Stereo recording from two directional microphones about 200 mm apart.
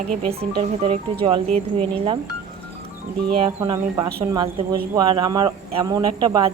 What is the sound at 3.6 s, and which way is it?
Speech, 20° right (ahead or behind).